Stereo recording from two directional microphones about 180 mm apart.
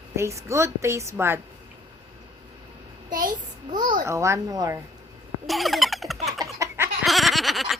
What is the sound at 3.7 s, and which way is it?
A child's voice, 25° right (ahead or behind).